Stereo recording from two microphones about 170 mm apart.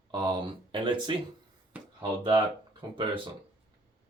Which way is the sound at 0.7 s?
30° right (ahead or behind).